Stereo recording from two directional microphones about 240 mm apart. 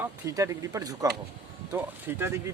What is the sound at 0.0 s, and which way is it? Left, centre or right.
Speech, centre.